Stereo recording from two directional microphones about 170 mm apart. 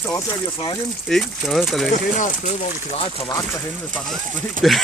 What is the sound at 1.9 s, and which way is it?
Speech, 45° left (ahead or behind).